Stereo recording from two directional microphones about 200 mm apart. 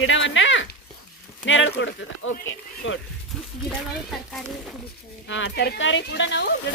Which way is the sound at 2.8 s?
75° left (ahead or behind).